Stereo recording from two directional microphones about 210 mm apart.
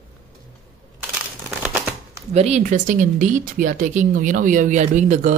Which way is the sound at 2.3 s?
30° right (ahead or behind).